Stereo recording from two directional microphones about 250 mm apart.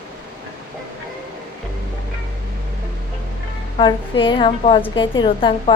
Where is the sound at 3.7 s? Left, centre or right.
Centre.